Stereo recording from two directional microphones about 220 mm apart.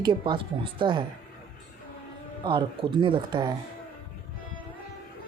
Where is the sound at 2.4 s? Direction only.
20° right (ahead or behind).